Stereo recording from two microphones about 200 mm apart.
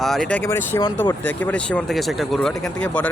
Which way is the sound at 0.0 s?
Centre (ahead or behind).